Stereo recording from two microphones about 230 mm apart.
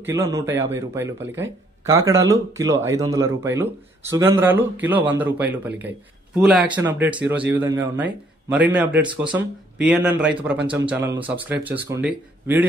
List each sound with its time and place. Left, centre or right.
0.0 s speech: centre
9.0 s speech: right
9.3 s speech: centre